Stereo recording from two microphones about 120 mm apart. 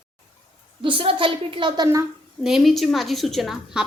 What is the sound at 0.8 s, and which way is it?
A woman's voice, 45° right (ahead or behind).